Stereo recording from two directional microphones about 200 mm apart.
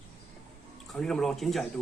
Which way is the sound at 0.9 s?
5° left (ahead or behind).